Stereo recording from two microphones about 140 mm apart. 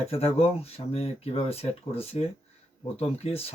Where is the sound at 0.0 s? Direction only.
45° left (ahead or behind).